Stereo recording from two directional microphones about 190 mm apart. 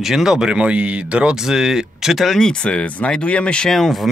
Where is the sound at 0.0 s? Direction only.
Centre (ahead or behind).